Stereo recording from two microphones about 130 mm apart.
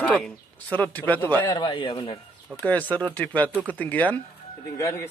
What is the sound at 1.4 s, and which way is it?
Speech, 35° left (ahead or behind).